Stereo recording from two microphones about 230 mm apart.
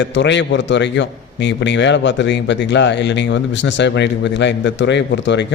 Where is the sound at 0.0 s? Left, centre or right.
Left.